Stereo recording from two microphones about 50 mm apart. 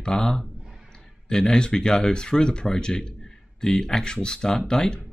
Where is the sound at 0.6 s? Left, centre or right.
Centre.